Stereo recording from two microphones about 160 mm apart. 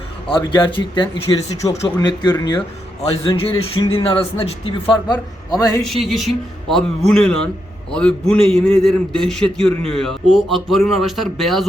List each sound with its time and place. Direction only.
0.3 s speech: 30° left (ahead or behind)
3.2 s a sound: 35° left (ahead or behind)
4.6 s speech: 25° left (ahead or behind)
5.8 s a man's voice: centre (ahead or behind)